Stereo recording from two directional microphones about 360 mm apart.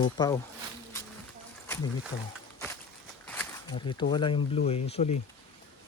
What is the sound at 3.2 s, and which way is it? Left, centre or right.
Speech, centre.